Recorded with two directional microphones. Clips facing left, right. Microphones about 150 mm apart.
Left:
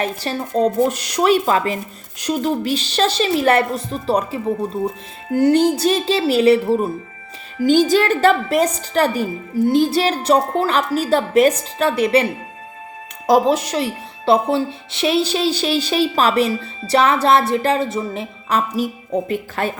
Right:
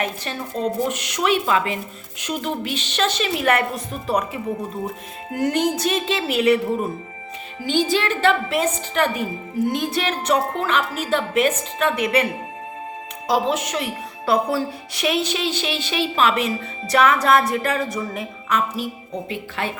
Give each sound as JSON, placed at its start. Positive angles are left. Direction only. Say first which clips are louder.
{"t": 0.0, "sound": "speech", "louder": "left 4 dB", "side_deg": 35}
{"t": 7.6, "sound": "a woman's voice", "louder": "left 7 dB", "side_deg": 45}
{"t": 19.3, "sound": "a woman's voice", "louder": "left 5 dB", "side_deg": 45}